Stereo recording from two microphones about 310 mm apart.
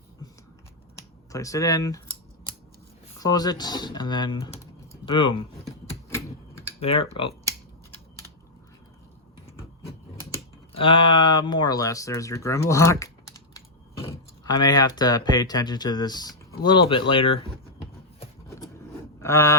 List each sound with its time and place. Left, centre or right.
0.9 s speech: centre
3.2 s speech: centre
5.6 s typing: centre
10.3 s speech: centre
18.2 s a sound: centre